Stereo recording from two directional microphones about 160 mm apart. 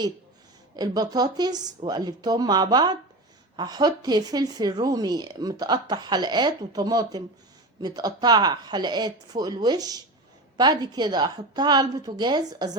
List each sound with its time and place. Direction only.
0.8 s speech: 25° right (ahead or behind)